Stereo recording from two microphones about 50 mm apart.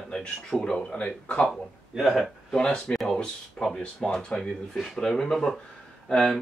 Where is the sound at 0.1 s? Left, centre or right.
Centre.